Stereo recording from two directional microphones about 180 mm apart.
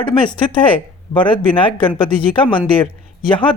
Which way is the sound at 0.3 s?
25° left (ahead or behind).